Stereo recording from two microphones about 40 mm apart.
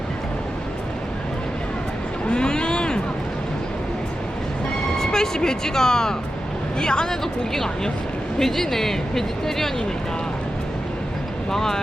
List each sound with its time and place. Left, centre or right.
2.3 s a sound: left
4.9 s a woman's voice: centre
11.5 s a woman's voice: centre